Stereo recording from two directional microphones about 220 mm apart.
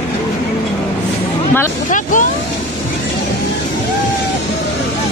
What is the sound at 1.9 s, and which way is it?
Vehicle, 35° left (ahead or behind).